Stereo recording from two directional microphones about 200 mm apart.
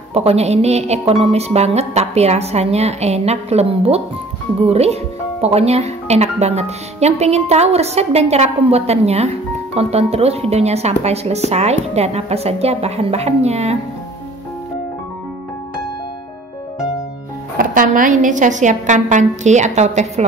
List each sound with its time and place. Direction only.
0.1 s speech: 30° right (ahead or behind)
17.6 s speech: 45° right (ahead or behind)